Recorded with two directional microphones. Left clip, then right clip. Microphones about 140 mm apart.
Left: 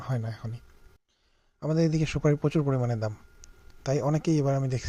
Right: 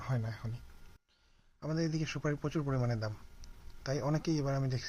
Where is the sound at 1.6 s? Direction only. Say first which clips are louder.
Left 9 dB; 50° left (ahead or behind).